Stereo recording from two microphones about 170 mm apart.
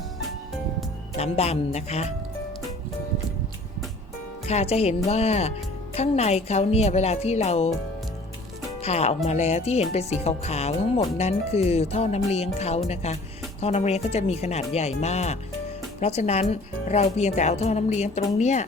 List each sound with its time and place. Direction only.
1.2 s a woman's voice: 40° left (ahead or behind)
4.4 s a woman's voice: 40° left (ahead or behind)
8.8 s a woman's voice: 40° left (ahead or behind)